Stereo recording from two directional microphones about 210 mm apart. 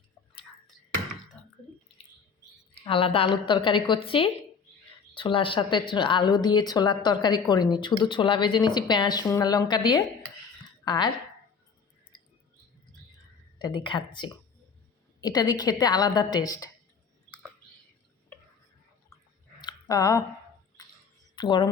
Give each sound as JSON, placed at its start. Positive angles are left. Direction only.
{"t": 2.8, "sound": "a woman's voice", "side_deg": 25}
{"t": 13.6, "sound": "a woman's voice", "side_deg": 20}
{"t": 19.6, "sound": "a sound", "side_deg": 15}
{"t": 21.3, "sound": "speech", "side_deg": 20}